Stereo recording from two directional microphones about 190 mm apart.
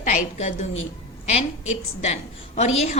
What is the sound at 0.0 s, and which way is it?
Speech, 40° left (ahead or behind).